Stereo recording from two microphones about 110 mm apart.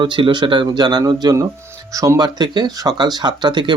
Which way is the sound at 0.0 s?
45° right (ahead or behind).